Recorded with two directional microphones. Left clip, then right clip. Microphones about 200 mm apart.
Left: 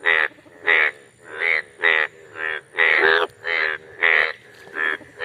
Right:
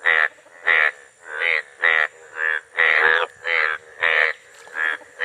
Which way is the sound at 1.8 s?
60° right (ahead or behind).